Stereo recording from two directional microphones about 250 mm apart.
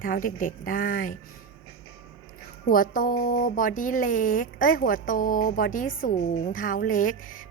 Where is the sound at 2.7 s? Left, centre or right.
Left.